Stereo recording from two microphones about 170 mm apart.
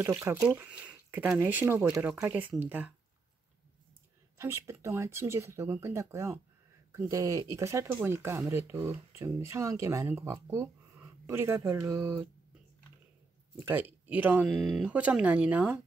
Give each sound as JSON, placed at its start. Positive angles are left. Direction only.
{"t": 0.0, "sound": "speech", "side_deg": -15}
{"t": 4.4, "sound": "speech", "side_deg": -15}
{"t": 13.6, "sound": "speech", "side_deg": -10}